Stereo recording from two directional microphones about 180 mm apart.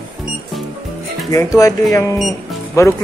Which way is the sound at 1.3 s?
20° left (ahead or behind).